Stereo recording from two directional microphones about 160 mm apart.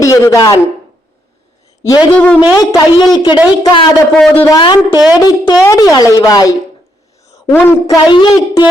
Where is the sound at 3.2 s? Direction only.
25° left (ahead or behind).